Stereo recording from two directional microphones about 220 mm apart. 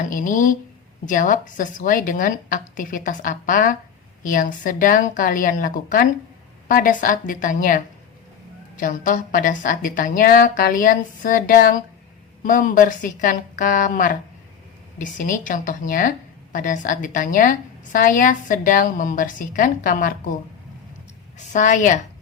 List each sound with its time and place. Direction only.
0.0 s a woman's voice: 35° left (ahead or behind)
8.8 s a woman's voice: 35° left (ahead or behind)
21.3 s a woman's voice: 35° left (ahead or behind)